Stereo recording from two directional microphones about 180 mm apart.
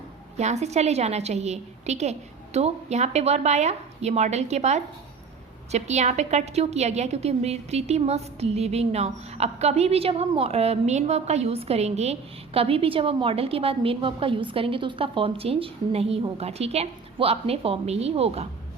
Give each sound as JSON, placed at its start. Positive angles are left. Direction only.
{"t": 0.3, "sound": "a woman's voice", "side_deg": -40}